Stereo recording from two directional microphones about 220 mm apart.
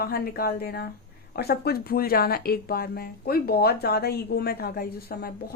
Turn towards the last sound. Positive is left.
turn(degrees=45)  # may be behind; listen again after turning